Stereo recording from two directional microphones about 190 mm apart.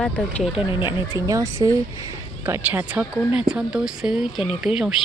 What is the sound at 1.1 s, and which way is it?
A woman's voice, 15° right (ahead or behind).